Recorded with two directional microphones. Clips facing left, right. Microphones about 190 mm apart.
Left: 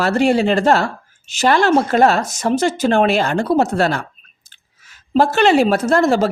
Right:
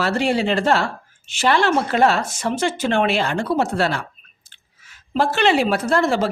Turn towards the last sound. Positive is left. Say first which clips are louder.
# left 4 dB
turn(degrees=40)  # may be behind; listen again after turning